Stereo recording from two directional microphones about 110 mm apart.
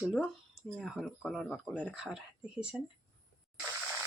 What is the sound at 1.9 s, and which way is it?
Speech, 5° right (ahead or behind).